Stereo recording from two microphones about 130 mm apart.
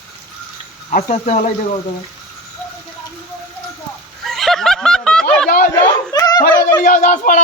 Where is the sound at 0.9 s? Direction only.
60° left (ahead or behind).